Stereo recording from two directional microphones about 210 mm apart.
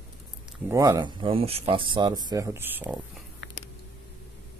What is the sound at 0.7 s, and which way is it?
Speech, 15° right (ahead or behind).